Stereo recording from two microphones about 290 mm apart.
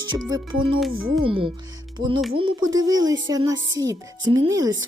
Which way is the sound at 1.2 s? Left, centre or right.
Centre.